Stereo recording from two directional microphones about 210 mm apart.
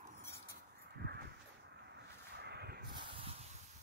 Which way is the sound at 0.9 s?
50° right (ahead or behind).